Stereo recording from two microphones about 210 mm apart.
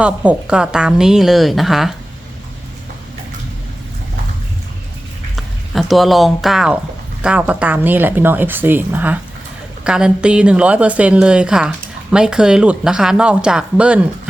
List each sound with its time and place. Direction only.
0.0 s speech: 5° right (ahead or behind)
5.4 s speech: centre (ahead or behind)